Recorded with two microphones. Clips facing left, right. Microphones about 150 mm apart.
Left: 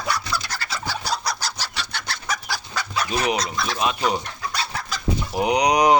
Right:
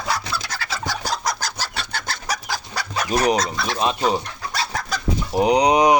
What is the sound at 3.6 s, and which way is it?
Speech, 30° right (ahead or behind).